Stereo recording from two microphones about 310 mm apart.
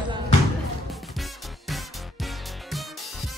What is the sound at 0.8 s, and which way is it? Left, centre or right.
Music, centre.